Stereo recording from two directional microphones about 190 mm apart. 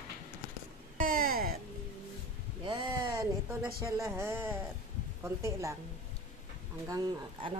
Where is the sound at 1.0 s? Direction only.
50° right (ahead or behind).